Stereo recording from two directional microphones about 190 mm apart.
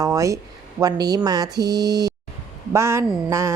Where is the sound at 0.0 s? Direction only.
15° right (ahead or behind).